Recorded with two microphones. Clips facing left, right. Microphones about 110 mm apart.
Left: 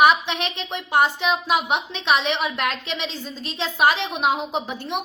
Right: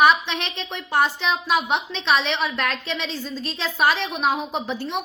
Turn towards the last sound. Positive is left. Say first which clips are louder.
# even
turn(degrees=15)  # may be behind; listen again after turning